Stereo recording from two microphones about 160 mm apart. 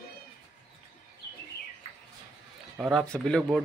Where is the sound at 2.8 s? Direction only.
Centre (ahead or behind).